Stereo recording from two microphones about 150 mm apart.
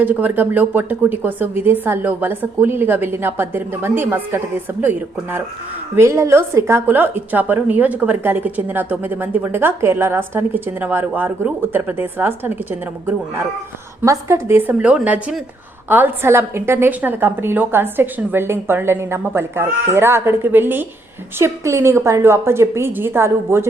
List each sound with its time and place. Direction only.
0.0 s a woman's voice: 10° right (ahead or behind)
14.0 s a woman's voice: 20° right (ahead or behind)